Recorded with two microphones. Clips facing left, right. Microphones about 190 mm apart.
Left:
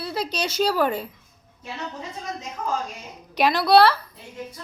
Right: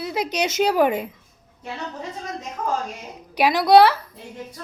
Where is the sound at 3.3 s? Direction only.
10° right (ahead or behind).